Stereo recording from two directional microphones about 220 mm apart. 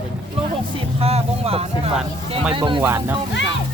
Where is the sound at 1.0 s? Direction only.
25° right (ahead or behind).